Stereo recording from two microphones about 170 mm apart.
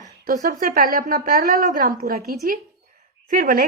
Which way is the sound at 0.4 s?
50° right (ahead or behind).